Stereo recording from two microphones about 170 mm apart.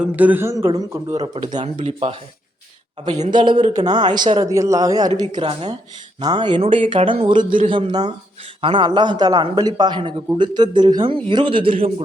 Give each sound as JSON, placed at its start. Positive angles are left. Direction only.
{"t": 0.0, "sound": "a man's voice", "side_deg": -10}
{"t": 1.6, "sound": "speech", "side_deg": -35}
{"t": 3.3, "sound": "a man's voice", "side_deg": -30}